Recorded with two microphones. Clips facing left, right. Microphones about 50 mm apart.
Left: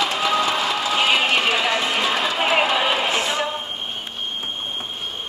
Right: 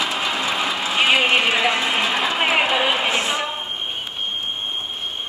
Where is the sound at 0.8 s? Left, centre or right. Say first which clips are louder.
Right 3 dB; right.